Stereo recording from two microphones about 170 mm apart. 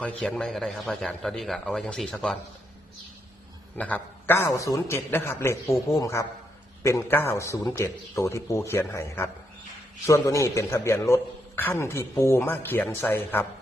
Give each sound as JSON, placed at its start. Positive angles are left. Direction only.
{"t": 0.0, "sound": "a man's voice", "side_deg": 5}
{"t": 3.8, "sound": "a man's voice", "side_deg": 10}